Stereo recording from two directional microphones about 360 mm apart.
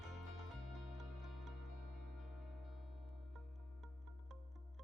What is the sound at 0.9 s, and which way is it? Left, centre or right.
Music, centre.